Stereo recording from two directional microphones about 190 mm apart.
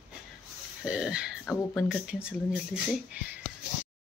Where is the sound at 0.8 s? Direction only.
5° right (ahead or behind).